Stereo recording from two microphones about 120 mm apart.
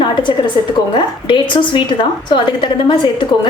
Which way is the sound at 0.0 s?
40° left (ahead or behind).